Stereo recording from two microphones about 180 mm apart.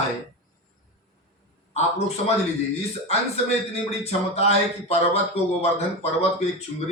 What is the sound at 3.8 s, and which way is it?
Speech, 35° left (ahead or behind).